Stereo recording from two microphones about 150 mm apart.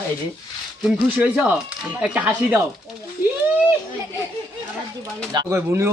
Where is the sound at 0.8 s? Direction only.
5° right (ahead or behind).